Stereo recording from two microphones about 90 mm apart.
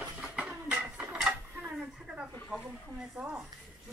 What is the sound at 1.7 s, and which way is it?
A woman's voice, 5° right (ahead or behind).